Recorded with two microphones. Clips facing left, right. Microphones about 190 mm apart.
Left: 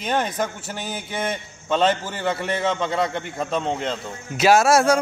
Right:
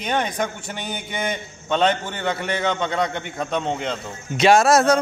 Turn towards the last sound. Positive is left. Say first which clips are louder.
# right 1 dB
turn(degrees=10)  # may be behind; listen again after turning